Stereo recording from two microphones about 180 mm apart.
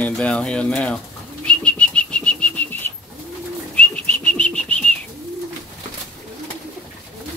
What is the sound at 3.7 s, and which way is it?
Bird, 10° left (ahead or behind).